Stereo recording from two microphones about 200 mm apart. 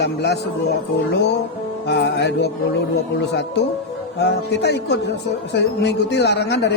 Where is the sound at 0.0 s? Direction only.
55° left (ahead or behind).